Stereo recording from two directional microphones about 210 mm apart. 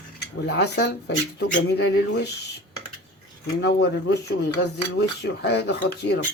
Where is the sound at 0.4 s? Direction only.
55° left (ahead or behind).